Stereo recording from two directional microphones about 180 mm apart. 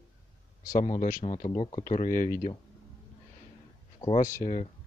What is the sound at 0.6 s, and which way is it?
Speech, 50° left (ahead or behind).